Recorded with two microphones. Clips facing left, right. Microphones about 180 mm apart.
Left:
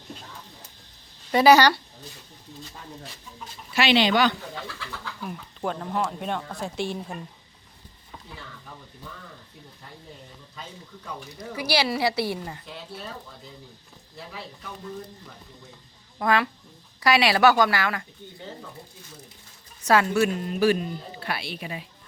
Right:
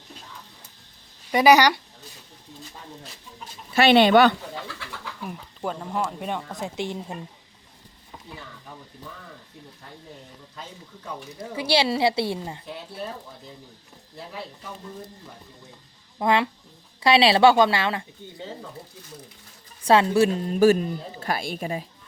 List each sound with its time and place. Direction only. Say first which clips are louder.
1.3 s speech: even; 15° right (ahead or behind)
3.8 s speech: right 5 dB; 55° right (ahead or behind)
5.2 s speech: even; 5° right (ahead or behind)
11.3 s a woman's voice: right 3 dB; 25° right (ahead or behind)
16.1 s a woman's voice: right 2 dB; 20° right (ahead or behind)
19.8 s a woman's voice: right 3 dB; 30° right (ahead or behind)
20.6 s speech: right 5 dB; 45° right (ahead or behind)